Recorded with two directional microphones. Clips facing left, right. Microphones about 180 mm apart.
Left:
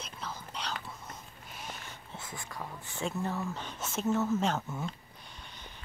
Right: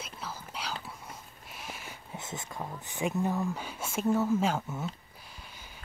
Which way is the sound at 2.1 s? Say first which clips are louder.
Right 3 dB; 20° right (ahead or behind).